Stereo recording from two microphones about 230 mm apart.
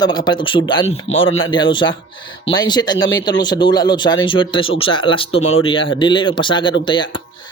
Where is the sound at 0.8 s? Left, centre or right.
Left.